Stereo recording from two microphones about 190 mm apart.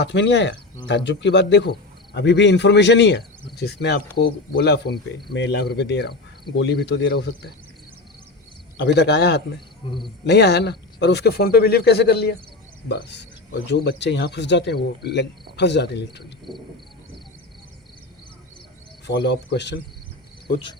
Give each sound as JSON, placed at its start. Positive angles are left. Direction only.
{"t": 0.0, "sound": "speech", "side_deg": 70}
{"t": 0.9, "sound": "cricket", "side_deg": 70}
{"t": 8.8, "sound": "cricket", "side_deg": 60}
{"t": 16.5, "sound": "a sound", "side_deg": -20}
{"t": 19.0, "sound": "cricket", "side_deg": 65}